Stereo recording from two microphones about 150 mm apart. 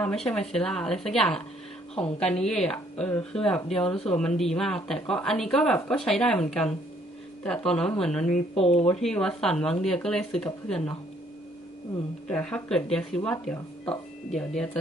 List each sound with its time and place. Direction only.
0.0 s speech: 5° left (ahead or behind)
8.5 s speech: 40° left (ahead or behind)
9.0 s speech: 5° left (ahead or behind)
12.3 s speech: 5° left (ahead or behind)